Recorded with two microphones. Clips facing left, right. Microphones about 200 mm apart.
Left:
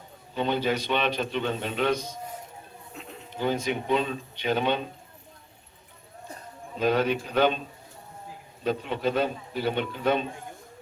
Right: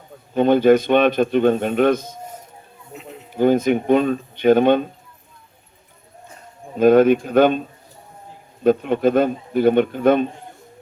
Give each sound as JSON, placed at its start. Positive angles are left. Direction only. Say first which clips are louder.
{"t": 0.3, "sound": "a man's voice", "louder": "right 13 dB", "side_deg": -50}
{"t": 2.9, "sound": "a sound", "louder": "right 7 dB", "side_deg": -5}
{"t": 3.3, "sound": "a man's voice", "louder": "right 11 dB", "side_deg": -50}
{"t": 6.7, "sound": "a man's voice", "louder": "right 12 dB", "side_deg": -50}
{"t": 8.6, "sound": "a man's voice", "louder": "right 11 dB", "side_deg": -50}